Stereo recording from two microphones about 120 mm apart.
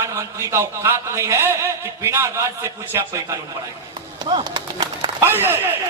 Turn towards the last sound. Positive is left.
turn(degrees=-20)  # may be behind; listen again after turning